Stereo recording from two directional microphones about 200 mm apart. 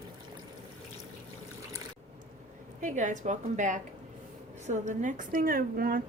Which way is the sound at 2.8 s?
40° right (ahead or behind).